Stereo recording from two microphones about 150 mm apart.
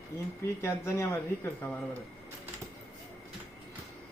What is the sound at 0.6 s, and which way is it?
Speech, 15° left (ahead or behind).